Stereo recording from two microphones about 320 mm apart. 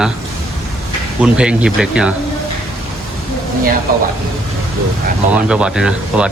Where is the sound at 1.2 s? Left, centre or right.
Centre.